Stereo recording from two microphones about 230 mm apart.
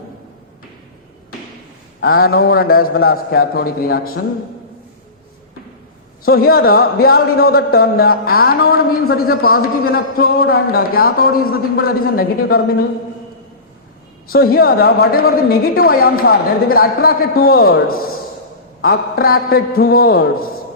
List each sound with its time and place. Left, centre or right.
2.0 s a man's voice: left
6.2 s a man's voice: left
14.3 s a man's voice: left